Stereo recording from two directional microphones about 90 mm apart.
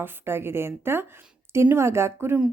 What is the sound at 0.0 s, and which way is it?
A woman's voice, 25° right (ahead or behind).